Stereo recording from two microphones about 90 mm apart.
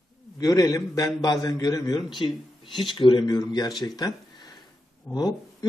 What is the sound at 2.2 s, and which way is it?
A man's voice, 65° left (ahead or behind).